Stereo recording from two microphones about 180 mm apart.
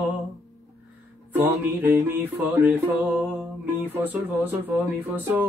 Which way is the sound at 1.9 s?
10° right (ahead or behind).